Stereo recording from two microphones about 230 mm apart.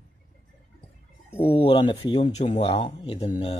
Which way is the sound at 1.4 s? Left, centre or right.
Left.